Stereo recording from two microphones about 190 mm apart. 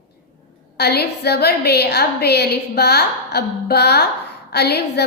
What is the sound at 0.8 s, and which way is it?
A woman's voice, 60° left (ahead or behind).